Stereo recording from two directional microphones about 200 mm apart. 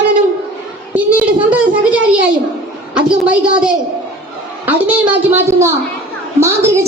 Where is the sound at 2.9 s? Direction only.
5° right (ahead or behind).